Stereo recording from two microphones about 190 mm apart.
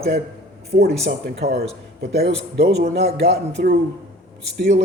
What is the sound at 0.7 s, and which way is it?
Mantra, 50° right (ahead or behind).